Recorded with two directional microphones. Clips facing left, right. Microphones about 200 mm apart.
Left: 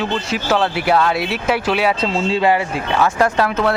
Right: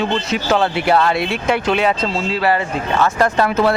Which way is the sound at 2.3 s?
25° left (ahead or behind).